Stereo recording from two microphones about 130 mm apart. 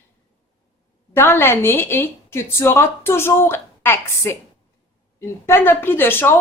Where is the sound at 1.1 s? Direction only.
20° left (ahead or behind).